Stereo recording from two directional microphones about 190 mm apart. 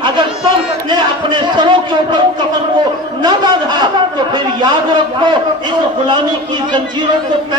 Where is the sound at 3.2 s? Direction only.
25° right (ahead or behind).